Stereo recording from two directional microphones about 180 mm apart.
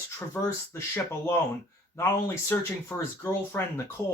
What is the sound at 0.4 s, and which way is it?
Speech, 10° left (ahead or behind).